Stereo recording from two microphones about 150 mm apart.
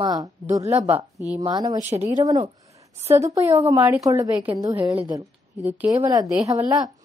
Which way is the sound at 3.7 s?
15° right (ahead or behind).